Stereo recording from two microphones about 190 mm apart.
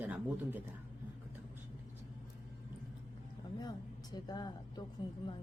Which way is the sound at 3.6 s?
20° left (ahead or behind).